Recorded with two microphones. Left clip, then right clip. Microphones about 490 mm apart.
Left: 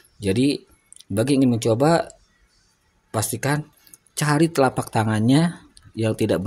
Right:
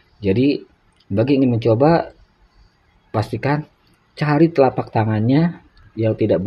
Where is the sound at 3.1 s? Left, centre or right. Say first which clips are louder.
Right 4 dB; left.